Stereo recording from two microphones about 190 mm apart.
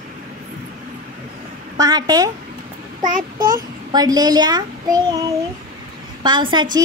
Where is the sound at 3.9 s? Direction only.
20° right (ahead or behind).